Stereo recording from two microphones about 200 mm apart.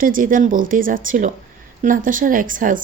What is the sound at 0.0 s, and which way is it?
A woman's voice, 45° right (ahead or behind).